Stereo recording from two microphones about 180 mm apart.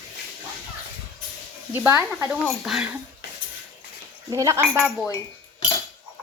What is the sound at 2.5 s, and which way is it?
Speech, centre (ahead or behind).